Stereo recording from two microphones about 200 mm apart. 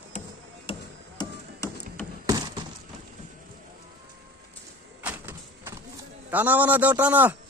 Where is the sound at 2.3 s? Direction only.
20° right (ahead or behind).